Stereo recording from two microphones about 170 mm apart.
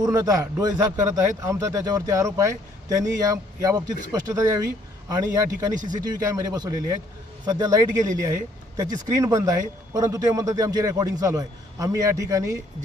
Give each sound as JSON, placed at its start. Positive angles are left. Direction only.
{"t": 0.0, "sound": "speech", "side_deg": -20}